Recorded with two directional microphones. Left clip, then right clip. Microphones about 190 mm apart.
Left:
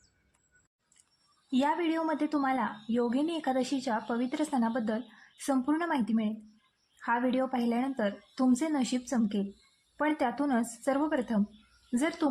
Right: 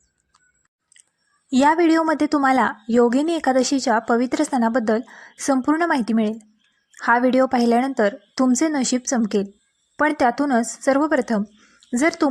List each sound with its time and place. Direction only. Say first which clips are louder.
1.5 s a woman's voice: right 13 dB; 40° right (ahead or behind)